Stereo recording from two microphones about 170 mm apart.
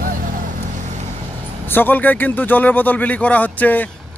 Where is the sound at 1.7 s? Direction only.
10° left (ahead or behind).